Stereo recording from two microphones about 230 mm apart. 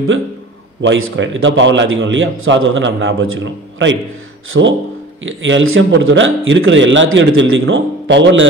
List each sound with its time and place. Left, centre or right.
0.8 s a man's voice: right
4.5 s a man's voice: right